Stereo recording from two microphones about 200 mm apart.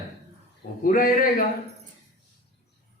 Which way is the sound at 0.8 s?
45° left (ahead or behind).